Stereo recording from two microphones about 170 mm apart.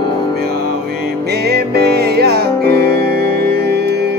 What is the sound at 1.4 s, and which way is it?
Music, 70° right (ahead or behind).